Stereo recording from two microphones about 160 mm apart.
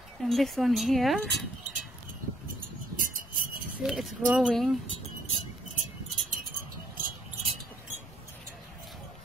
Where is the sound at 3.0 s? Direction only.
60° right (ahead or behind).